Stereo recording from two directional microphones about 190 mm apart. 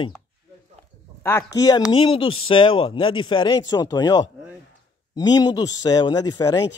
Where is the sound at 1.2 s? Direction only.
15° left (ahead or behind).